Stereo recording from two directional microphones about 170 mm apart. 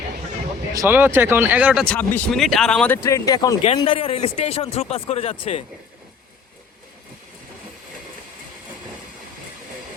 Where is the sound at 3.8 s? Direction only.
35° left (ahead or behind).